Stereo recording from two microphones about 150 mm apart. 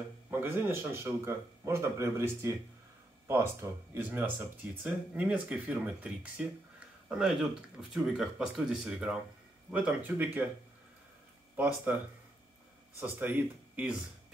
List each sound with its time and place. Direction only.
0.3 s speech: 15° right (ahead or behind)
3.9 s speech: 10° right (ahead or behind)
11.5 s speech: 10° right (ahead or behind)
13.0 s speech: 10° right (ahead or behind)